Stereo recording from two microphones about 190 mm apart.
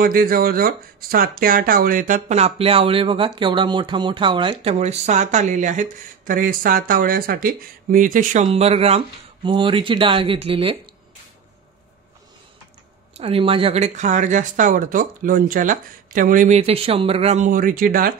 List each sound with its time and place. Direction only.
0.0 s speech: 50° right (ahead or behind); by 10.8 s 30° right (ahead or behind)
13.2 s speech: 30° right (ahead or behind); by 18.1 s 50° right (ahead or behind)